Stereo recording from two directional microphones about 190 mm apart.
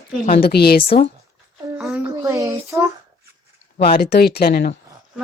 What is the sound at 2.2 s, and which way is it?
Speech, 15° right (ahead or behind).